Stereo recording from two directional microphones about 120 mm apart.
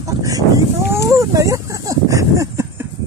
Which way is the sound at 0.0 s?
30° right (ahead or behind).